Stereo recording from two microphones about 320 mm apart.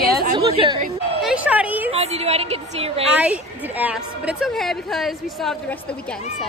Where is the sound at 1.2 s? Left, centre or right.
Centre.